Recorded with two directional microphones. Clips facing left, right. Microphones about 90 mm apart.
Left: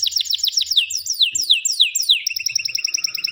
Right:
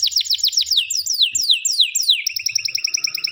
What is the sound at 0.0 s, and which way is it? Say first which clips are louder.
Bird: right 1 dB; 40° left (ahead or behind).